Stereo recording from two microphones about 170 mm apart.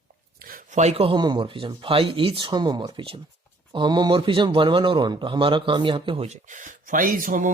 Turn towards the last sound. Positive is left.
turn(degrees=-50)  # may be behind; listen again after turning